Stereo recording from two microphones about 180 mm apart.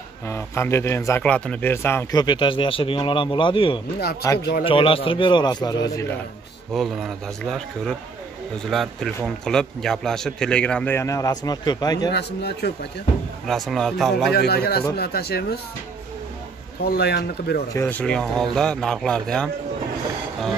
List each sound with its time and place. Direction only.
0.3 s speech: 15° left (ahead or behind)
4.4 s speech: 65° left (ahead or behind)
4.6 s speech: 30° left (ahead or behind)
6.7 s speech: centre (ahead or behind); by 12.1 s 20° left (ahead or behind)
12.1 s a man's voice: 65° left (ahead or behind)
13.5 s speech: centre (ahead or behind)
14.3 s speech: 65° left (ahead or behind)
16.8 s speech: 60° left (ahead or behind)
17.7 s speech: 10° left (ahead or behind)